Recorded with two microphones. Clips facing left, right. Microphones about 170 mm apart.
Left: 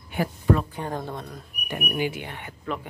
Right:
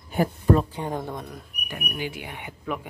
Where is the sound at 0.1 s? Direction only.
40° right (ahead or behind).